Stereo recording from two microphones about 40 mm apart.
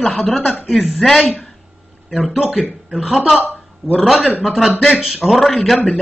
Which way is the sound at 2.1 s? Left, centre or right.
Centre.